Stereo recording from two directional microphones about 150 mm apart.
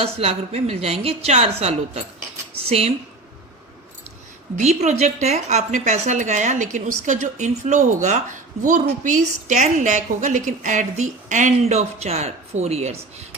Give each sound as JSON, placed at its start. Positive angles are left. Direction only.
{"t": 0.0, "sound": "a woman's voice", "side_deg": -45}
{"t": 4.5, "sound": "a woman's voice", "side_deg": -45}